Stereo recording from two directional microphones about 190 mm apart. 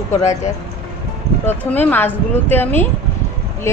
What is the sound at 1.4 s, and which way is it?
A woman's voice, 10° left (ahead or behind).